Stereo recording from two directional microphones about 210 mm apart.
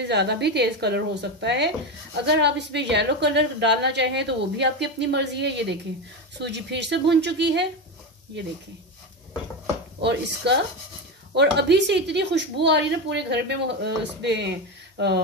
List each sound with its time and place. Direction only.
0.0 s a woman's voice: 55° right (ahead or behind)
10.0 s speech: 55° right (ahead or behind)